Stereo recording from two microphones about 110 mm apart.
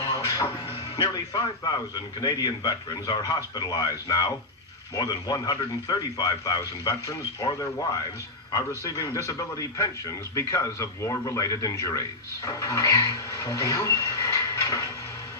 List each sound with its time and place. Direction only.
0.0 s music: 35° left (ahead or behind)
1.0 s a man's voice: 35° left (ahead or behind)